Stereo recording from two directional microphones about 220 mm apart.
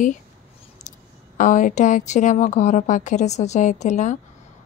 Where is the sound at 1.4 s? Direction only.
35° left (ahead or behind).